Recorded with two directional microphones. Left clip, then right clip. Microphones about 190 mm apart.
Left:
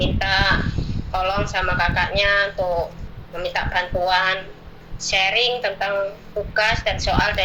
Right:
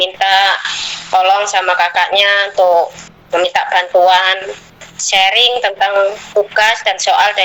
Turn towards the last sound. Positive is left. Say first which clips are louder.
# right 9 dB
turn(degrees=-50)  # may be behind; listen again after turning